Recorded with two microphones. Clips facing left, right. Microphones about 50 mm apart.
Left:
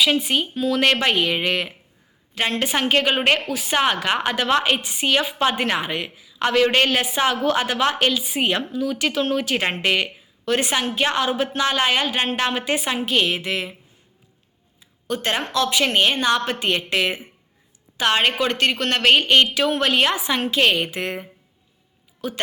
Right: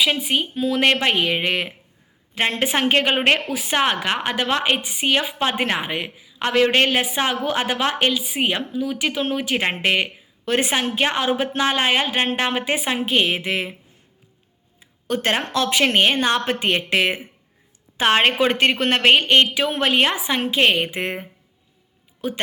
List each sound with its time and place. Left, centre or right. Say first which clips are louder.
0.3 s a woman's voice: even; centre
3.6 s a woman's voice: even; centre
5.5 s a woman's voice: even; right
14.8 s a woman's voice: right 2 dB; right